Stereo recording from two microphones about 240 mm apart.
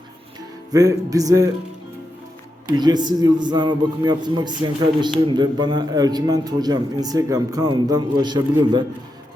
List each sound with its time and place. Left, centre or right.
0.7 s a man's voice: centre
2.7 s a man's voice: centre